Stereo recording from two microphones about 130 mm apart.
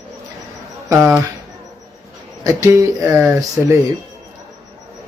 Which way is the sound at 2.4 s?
25° right (ahead or behind).